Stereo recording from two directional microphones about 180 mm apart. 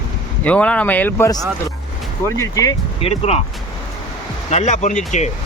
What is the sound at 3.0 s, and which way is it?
Speech, 35° left (ahead or behind).